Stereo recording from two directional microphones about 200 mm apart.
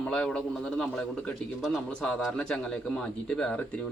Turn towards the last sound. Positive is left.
turn(degrees=5)  # may be behind; listen again after turning